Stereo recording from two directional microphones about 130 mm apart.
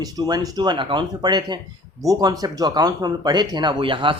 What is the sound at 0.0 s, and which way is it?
Speech, 30° right (ahead or behind).